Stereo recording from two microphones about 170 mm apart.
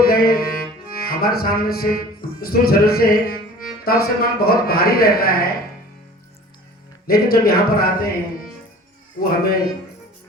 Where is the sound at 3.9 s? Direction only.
60° left (ahead or behind).